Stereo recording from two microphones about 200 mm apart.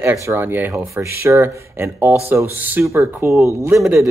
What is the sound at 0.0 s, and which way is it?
Speech, 15° right (ahead or behind).